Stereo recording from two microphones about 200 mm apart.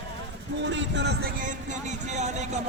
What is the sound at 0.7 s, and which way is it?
Speech, 65° right (ahead or behind).